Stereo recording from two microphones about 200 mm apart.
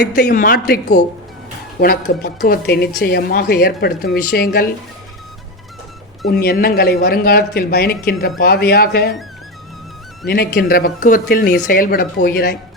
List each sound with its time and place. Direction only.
0.0 s speech: 50° left (ahead or behind)
0.7 s speech: 55° left (ahead or behind)
6.2 s speech: 50° left (ahead or behind)
10.2 s speech: 55° left (ahead or behind)